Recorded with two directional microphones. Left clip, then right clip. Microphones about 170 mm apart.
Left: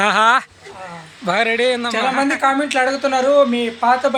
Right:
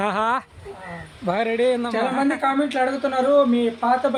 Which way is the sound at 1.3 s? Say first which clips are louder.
Left 4 dB; 5° right (ahead or behind).